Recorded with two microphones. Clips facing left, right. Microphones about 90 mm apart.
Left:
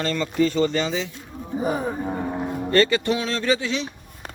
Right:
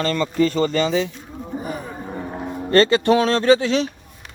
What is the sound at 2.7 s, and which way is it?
Speech, 35° right (ahead or behind).